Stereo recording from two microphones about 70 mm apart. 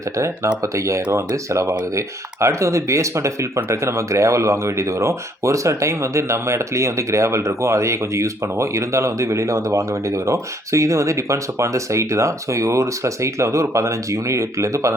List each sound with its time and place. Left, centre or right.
0.2 s speech: right